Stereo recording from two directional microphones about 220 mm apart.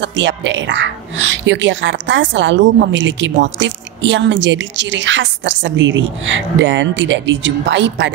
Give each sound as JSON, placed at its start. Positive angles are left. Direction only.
{"t": 0.0, "sound": "a woman's voice", "side_deg": -55}